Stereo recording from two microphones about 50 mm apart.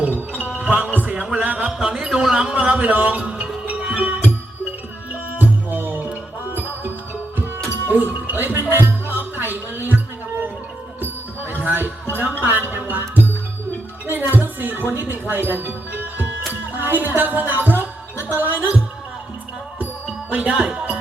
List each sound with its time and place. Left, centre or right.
0.0 s music: right
1.4 s a sound: right
2.6 s music: right
5.3 s music: right
11.0 s music: right
18.3 s speech: right
20.3 s music: right
20.6 s speech: centre